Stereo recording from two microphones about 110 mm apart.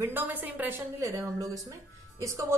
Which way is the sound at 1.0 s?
30° right (ahead or behind).